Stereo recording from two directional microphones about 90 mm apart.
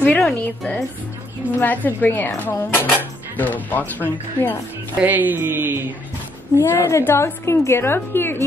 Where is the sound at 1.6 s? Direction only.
20° left (ahead or behind).